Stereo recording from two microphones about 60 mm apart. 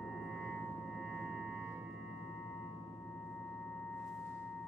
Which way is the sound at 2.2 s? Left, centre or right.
Left.